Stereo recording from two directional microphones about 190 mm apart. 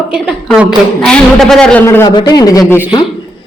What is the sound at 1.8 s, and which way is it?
Speech, 15° left (ahead or behind).